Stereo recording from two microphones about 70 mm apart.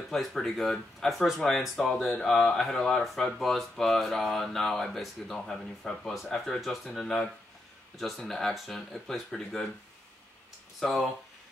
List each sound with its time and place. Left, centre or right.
0.1 s speech: centre
10.8 s speech: centre